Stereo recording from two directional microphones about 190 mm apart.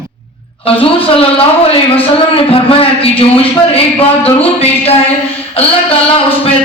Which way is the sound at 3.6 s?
30° left (ahead or behind).